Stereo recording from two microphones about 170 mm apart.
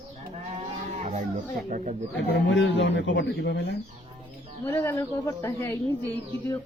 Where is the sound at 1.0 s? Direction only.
45° right (ahead or behind).